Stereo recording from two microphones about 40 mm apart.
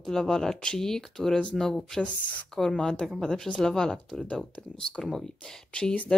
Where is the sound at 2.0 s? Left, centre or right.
Left.